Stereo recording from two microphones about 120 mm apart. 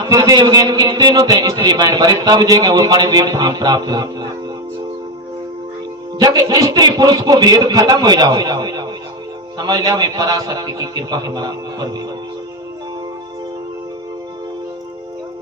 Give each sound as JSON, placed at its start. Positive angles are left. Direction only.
{"t": 0.0, "sound": "a man's voice", "side_deg": -30}
{"t": 6.1, "sound": "a man's voice", "side_deg": -30}